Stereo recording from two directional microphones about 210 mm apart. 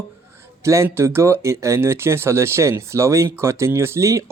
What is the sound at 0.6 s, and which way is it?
Speech, 15° right (ahead or behind).